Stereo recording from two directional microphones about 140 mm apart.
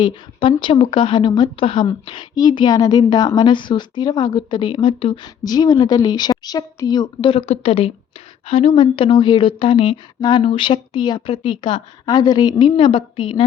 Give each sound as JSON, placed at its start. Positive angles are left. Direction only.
{"t": 0.0, "sound": "speech", "side_deg": 35}